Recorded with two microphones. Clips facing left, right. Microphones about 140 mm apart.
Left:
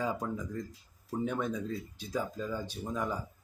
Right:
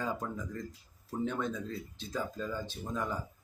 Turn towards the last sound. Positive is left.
turn(degrees=10)  # may be behind; listen again after turning